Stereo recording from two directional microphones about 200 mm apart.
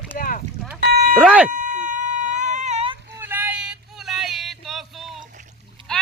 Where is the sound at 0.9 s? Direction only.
50° right (ahead or behind).